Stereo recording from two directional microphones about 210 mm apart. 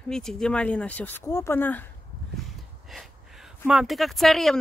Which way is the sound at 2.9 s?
Centre (ahead or behind).